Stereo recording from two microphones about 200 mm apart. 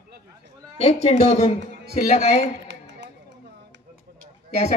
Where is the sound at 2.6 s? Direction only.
60° right (ahead or behind).